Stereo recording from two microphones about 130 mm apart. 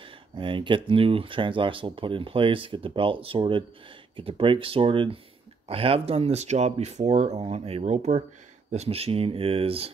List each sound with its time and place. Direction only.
0.0 s speech: 40° right (ahead or behind)